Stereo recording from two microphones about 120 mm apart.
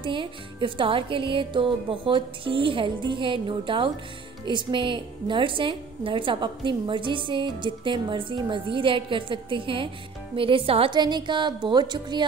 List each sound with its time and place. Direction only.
0.0 s a woman's voice: 45° right (ahead or behind)
11.0 s music: 40° right (ahead or behind)